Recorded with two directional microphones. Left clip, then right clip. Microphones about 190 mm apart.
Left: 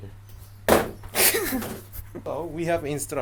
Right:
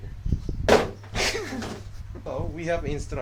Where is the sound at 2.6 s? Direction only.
50° left (ahead or behind).